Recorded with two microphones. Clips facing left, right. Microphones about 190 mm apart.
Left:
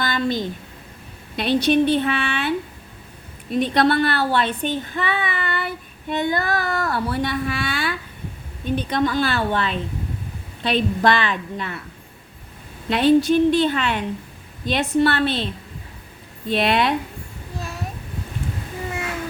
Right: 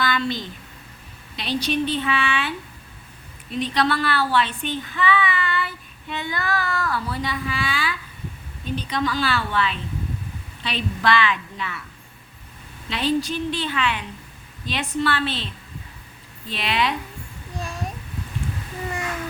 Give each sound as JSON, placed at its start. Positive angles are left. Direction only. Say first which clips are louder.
{"t": 0.0, "sound": "a sound", "louder": "left 2 dB", "side_deg": 45}
{"t": 1.4, "sound": "a woman's voice", "louder": "left 7 dB", "side_deg": 55}
{"t": 3.6, "sound": "speech", "louder": "left 5 dB", "side_deg": 55}
{"t": 6.9, "sound": "a woman's voice", "louder": "left 4 dB", "side_deg": 60}
{"t": 12.9, "sound": "a woman's voice", "louder": "left 8 dB", "side_deg": 55}
{"t": 16.5, "sound": "a woman's voice", "louder": "left 5 dB", "side_deg": 55}